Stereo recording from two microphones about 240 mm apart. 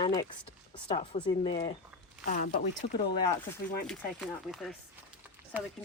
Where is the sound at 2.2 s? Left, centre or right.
Left.